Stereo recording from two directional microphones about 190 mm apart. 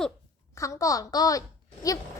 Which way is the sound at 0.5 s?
15° left (ahead or behind).